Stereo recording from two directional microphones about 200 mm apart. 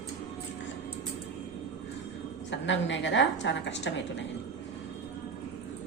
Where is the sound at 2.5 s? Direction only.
65° left (ahead or behind).